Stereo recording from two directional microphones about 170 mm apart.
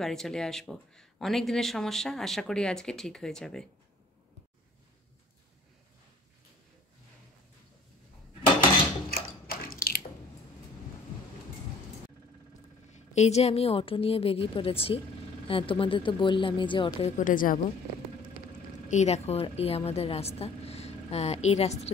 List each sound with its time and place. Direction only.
0.0 s speech: centre (ahead or behind)
9.1 s a sound: 60° left (ahead or behind)
12.9 s a woman's voice: 40° left (ahead or behind)
17.2 s speech: 50° left (ahead or behind)
18.9 s a woman's voice: 40° left (ahead or behind)